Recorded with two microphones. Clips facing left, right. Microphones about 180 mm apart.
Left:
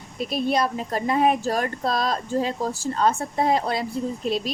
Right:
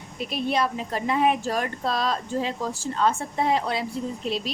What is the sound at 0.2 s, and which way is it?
Speech, 40° left (ahead or behind).